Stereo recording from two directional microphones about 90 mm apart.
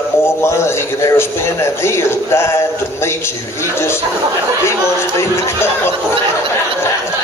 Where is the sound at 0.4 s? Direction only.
30° left (ahead or behind).